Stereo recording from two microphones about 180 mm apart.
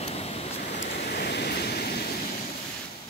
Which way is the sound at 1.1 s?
65° left (ahead or behind).